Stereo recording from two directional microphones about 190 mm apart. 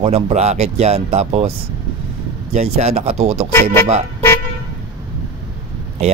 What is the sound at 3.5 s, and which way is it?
Speech, 10° left (ahead or behind).